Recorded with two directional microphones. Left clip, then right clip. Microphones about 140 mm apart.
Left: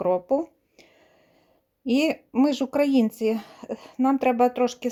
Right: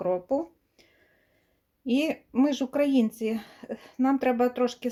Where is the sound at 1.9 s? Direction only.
25° left (ahead or behind).